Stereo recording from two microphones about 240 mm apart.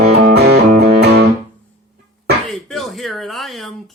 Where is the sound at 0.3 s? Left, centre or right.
Right.